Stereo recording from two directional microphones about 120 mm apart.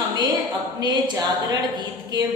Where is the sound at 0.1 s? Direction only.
35° right (ahead or behind).